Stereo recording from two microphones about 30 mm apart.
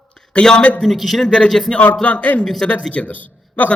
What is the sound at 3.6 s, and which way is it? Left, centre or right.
Speech, left.